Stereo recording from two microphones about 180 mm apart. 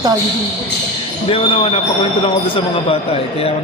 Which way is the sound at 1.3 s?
30° left (ahead or behind).